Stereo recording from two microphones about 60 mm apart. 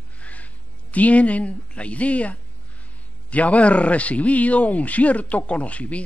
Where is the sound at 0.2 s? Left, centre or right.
Left.